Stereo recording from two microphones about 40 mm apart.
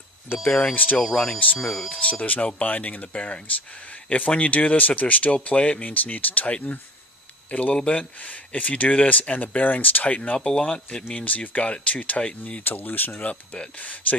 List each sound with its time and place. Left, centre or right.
0.4 s speech: left
0.9 s speech: centre
1.9 s speech: left
7.5 s speech: left
10.1 s speech: left
11.3 s speech: left
12.6 s speech: left
13.1 s speech: left